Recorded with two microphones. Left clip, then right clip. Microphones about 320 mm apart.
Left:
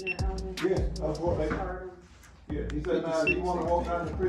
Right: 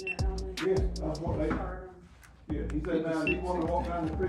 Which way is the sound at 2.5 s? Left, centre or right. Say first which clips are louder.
Left 1 dB; centre.